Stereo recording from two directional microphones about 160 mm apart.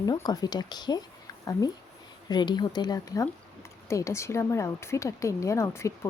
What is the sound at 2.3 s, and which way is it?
Speech, 25° left (ahead or behind).